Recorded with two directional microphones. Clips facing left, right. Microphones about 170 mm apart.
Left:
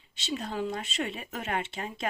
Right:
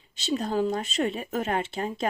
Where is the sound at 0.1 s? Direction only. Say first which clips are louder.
Right 7 dB; 40° right (ahead or behind).